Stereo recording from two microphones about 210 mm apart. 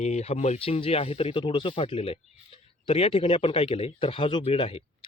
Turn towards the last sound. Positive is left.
turn(degrees=25)  # may be behind; listen again after turning